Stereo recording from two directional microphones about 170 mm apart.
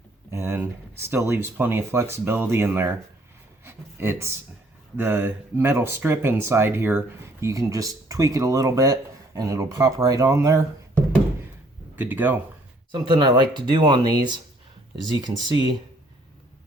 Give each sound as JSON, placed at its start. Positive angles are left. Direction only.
{"t": 0.3, "sound": "speech", "side_deg": -15}
{"t": 3.6, "sound": "a sound", "side_deg": -15}
{"t": 4.9, "sound": "speech", "side_deg": -15}
{"t": 12.9, "sound": "speech", "side_deg": -25}